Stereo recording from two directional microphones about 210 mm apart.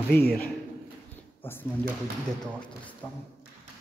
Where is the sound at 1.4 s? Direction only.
10° left (ahead or behind).